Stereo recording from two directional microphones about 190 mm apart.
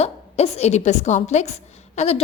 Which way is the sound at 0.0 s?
35° left (ahead or behind).